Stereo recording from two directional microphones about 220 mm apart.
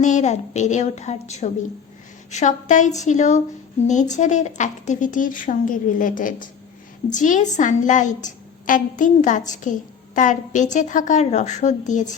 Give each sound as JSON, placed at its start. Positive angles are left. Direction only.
{"t": 0.0, "sound": "a woman's voice", "side_deg": 35}